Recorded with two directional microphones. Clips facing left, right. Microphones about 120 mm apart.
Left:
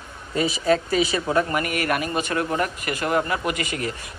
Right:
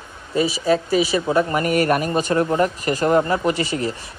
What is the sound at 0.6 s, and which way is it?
Speech, 20° right (ahead or behind).